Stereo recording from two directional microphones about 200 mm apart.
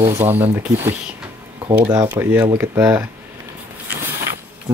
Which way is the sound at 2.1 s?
10° right (ahead or behind).